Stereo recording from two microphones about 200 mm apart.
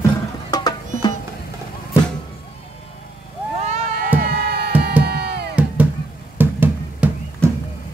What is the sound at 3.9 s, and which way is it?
Music, 50° right (ahead or behind).